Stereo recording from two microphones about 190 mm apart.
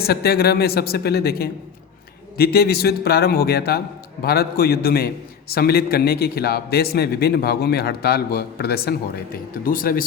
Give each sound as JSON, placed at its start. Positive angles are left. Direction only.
{"t": 0.0, "sound": "a man's voice", "side_deg": 55}